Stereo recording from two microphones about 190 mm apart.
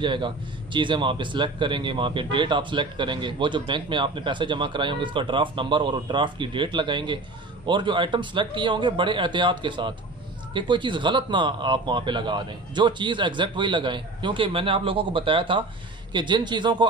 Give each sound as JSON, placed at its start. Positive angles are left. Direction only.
{"t": 0.0, "sound": "speech", "side_deg": -25}